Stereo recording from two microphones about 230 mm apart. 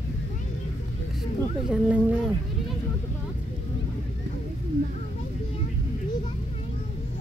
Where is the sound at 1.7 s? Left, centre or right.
Centre.